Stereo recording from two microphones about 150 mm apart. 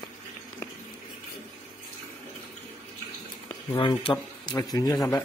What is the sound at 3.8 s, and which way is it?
Speech, 35° left (ahead or behind).